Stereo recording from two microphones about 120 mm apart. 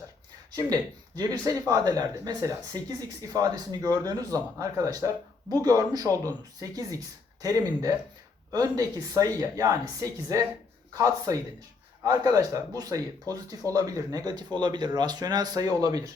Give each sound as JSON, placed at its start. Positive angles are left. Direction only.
{"t": 0.5, "sound": "speech", "side_deg": -30}
{"t": 8.5, "sound": "speech", "side_deg": -30}